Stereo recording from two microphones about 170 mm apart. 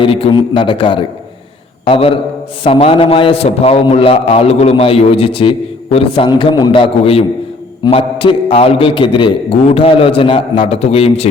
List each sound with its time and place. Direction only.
0.0 s a man's voice: 30° left (ahead or behind)